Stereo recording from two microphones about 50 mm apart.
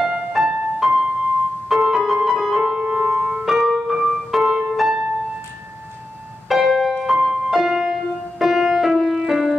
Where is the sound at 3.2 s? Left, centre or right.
Centre.